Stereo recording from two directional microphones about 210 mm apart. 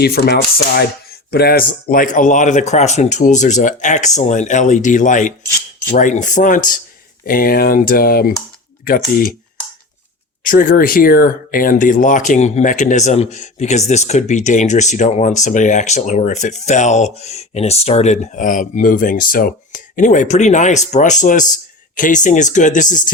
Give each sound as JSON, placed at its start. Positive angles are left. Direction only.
{"t": 0.0, "sound": "speech", "side_deg": 50}
{"t": 10.4, "sound": "speech", "side_deg": 40}